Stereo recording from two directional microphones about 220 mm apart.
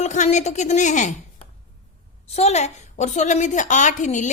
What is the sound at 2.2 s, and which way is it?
A woman's voice, 30° left (ahead or behind).